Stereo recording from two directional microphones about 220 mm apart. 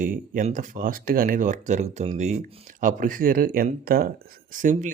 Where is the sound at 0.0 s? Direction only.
40° right (ahead or behind).